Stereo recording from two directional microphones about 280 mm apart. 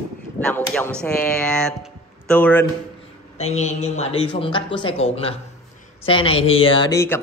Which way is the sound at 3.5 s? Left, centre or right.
Left.